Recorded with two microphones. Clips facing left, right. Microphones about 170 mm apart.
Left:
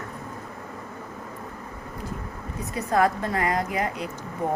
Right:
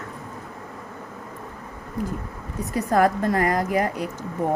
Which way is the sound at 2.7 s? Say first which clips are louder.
Right 3 dB; 40° right (ahead or behind).